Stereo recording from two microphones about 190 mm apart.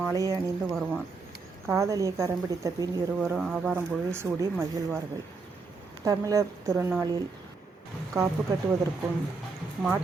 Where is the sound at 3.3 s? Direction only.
5° right (ahead or behind).